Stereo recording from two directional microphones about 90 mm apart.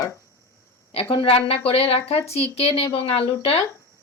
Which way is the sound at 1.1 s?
90° left.